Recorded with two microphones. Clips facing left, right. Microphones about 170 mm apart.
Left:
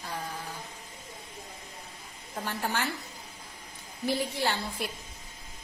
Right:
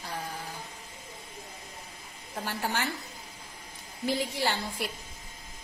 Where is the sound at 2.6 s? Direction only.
15° right (ahead or behind).